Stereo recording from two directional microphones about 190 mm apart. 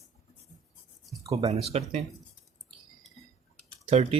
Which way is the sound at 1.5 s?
35° right (ahead or behind).